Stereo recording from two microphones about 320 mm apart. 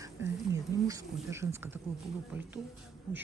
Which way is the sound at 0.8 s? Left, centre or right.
Centre.